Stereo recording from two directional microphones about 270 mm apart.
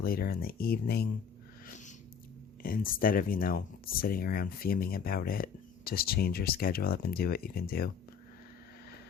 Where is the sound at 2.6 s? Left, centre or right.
Left.